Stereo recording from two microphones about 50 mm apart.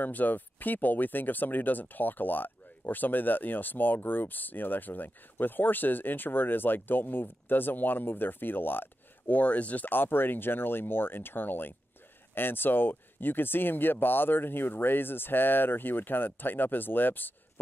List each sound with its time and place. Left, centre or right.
0.0 s speech: left
9.3 s speech: left